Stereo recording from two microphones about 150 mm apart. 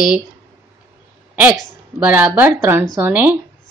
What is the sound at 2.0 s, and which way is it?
A woman's voice, 15° right (ahead or behind).